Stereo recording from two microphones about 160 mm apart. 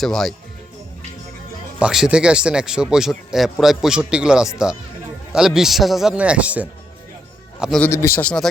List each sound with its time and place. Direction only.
0.0 s speech: centre (ahead or behind)
1.8 s speech: 5° right (ahead or behind)
7.8 s a man's voice: 15° left (ahead or behind)